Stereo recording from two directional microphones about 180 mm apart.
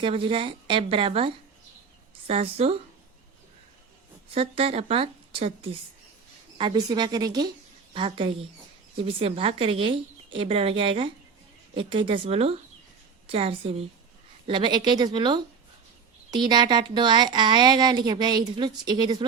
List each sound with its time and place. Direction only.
0.0 s a woman's voice: 30° right (ahead or behind)
4.4 s a woman's voice: 30° right (ahead or behind)